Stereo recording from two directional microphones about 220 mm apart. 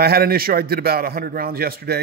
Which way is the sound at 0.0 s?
45° right (ahead or behind).